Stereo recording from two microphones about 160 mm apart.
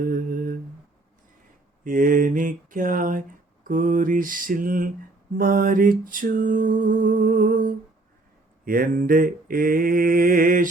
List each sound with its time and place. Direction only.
0.0 s humming: 60° right (ahead or behind)
1.8 s mantra: 55° right (ahead or behind)